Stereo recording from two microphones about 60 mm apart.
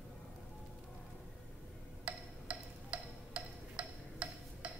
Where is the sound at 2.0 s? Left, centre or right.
Centre.